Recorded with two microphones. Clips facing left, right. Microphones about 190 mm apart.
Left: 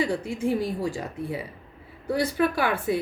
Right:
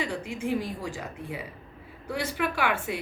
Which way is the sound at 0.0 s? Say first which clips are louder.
Left 5 dB; 35° left (ahead or behind).